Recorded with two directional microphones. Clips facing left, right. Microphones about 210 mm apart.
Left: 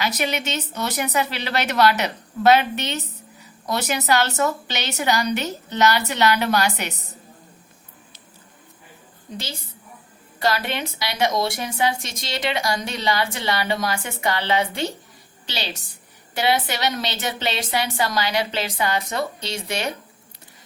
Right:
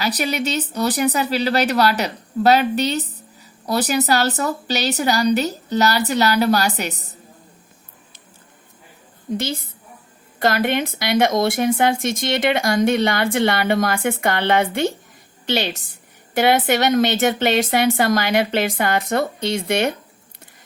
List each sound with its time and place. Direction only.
0.0 s speech: 35° right (ahead or behind)
10.4 s a woman's voice: 50° right (ahead or behind)